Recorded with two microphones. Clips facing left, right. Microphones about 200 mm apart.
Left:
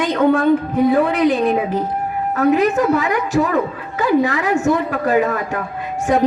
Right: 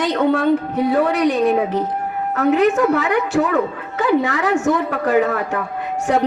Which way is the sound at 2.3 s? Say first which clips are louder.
Even; 75° right (ahead or behind).